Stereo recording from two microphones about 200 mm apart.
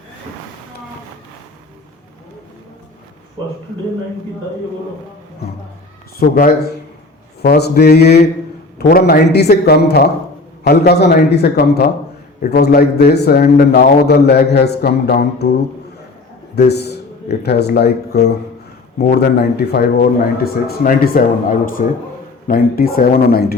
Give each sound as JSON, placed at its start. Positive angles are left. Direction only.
{"t": 6.1, "sound": "speech", "side_deg": 45}
{"t": 16.6, "sound": "a man's voice", "side_deg": 55}